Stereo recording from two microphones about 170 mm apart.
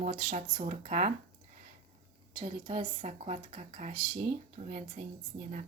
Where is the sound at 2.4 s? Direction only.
40° right (ahead or behind).